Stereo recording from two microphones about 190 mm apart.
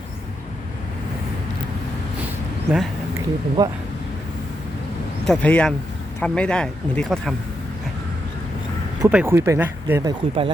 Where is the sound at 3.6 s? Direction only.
20° right (ahead or behind).